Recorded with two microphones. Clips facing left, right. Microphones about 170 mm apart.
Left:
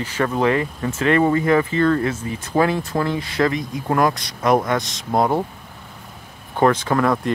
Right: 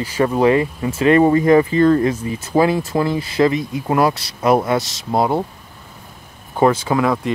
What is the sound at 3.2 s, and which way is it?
Speech, 25° right (ahead or behind).